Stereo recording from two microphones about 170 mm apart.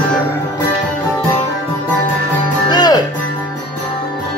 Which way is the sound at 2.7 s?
25° left (ahead or behind).